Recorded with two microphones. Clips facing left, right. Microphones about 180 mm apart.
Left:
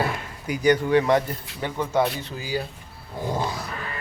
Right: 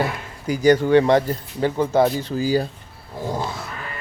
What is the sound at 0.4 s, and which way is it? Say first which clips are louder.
Speech: right 4 dB; 35° right (ahead or behind).